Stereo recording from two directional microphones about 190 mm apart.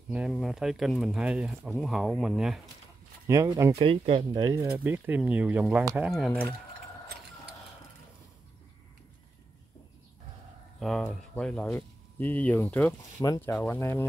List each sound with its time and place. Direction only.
0.1 s speech: 5° right (ahead or behind)
3.3 s speech: 15° right (ahead or behind)
3.7 s speech: 30° right (ahead or behind); by 6.4 s centre (ahead or behind)
10.8 s speech: centre (ahead or behind)